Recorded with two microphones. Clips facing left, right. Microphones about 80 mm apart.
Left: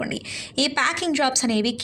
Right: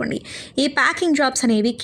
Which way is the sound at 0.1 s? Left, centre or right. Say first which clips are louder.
Right 5 dB; right.